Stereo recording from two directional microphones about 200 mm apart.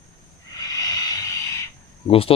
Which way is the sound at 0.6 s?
15° left (ahead or behind).